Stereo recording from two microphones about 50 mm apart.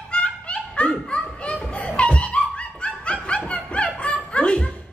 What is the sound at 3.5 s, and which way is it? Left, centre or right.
Snicker, left.